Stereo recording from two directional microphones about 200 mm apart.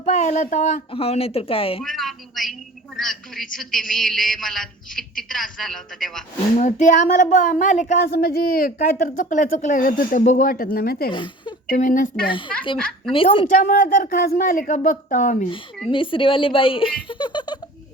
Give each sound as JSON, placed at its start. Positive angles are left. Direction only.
{"t": 0.0, "sound": "a woman's voice", "side_deg": 35}
{"t": 1.8, "sound": "a woman's voice", "side_deg": 0}
{"t": 6.6, "sound": "speech", "side_deg": 40}
{"t": 11.1, "sound": "speech", "side_deg": 25}
{"t": 11.7, "sound": "speech", "side_deg": 40}
{"t": 12.7, "sound": "a woman's voice", "side_deg": 0}
{"t": 13.1, "sound": "a woman's voice", "side_deg": 25}
{"t": 13.7, "sound": "speech", "side_deg": 40}
{"t": 15.9, "sound": "speech", "side_deg": 25}